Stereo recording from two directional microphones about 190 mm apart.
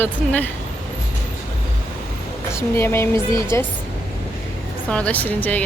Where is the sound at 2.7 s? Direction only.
10° left (ahead or behind).